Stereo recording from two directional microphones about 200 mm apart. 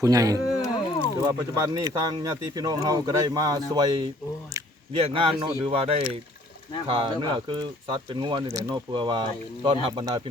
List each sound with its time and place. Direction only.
0.0 s speech: 15° right (ahead or behind)
0.3 s a sound: 20° left (ahead or behind)
1.2 s speech: 20° right (ahead or behind)
5.1 s speech: 25° right (ahead or behind)